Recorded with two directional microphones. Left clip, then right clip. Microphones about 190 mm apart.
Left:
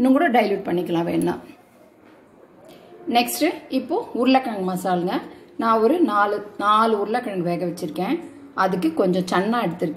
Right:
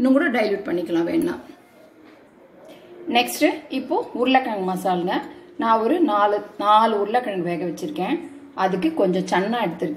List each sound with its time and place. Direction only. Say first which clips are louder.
0.0 s a woman's voice: left 2 dB; 40° left (ahead or behind)
3.1 s a woman's voice: right 1 dB; 40° left (ahead or behind)